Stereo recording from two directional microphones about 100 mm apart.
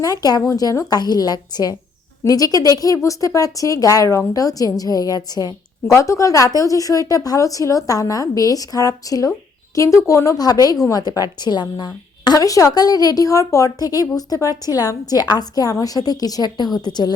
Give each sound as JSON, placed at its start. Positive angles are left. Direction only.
{"t": 0.0, "sound": "a woman's voice", "side_deg": 40}